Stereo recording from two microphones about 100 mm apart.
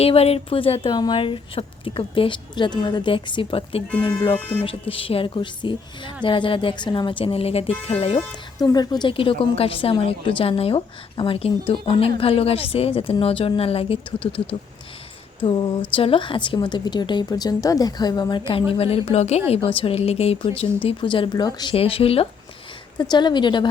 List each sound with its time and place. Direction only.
0.0 s a woman's voice: 90° left; by 0.9 s 65° left (ahead or behind)
0.9 s a woman's voice: 45° left (ahead or behind); by 3.8 s 70° left (ahead or behind)
4.0 s a woman's voice: 50° left (ahead or behind)
4.4 s speech: 15° left (ahead or behind)
4.6 s a woman's voice: 65° left (ahead or behind)
8.5 s a woman's voice: 45° left (ahead or behind); by 14.4 s 70° left (ahead or behind)
15.4 s a woman's voice: 60° left (ahead or behind)
16.6 s a woman's voice: 45° left (ahead or behind)
18.7 s a woman's voice: 70° left (ahead or behind)
20.8 s a woman's voice: 60° left (ahead or behind)
21.8 s a woman's voice: 75° left (ahead or behind)
23.0 s a woman's voice: 45° left (ahead or behind)